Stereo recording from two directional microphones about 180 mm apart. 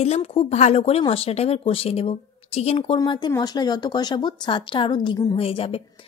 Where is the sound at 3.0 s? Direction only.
25° left (ahead or behind).